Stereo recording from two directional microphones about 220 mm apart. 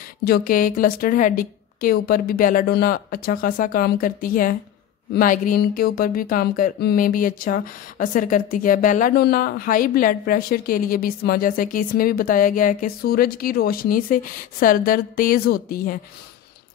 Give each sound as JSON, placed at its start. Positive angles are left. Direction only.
{"t": 0.2, "sound": "speech", "side_deg": 40}